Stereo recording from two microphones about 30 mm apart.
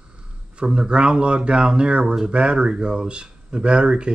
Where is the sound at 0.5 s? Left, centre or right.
Right.